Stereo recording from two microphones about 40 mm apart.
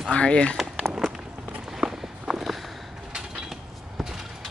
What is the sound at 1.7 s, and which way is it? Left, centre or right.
Walk, centre.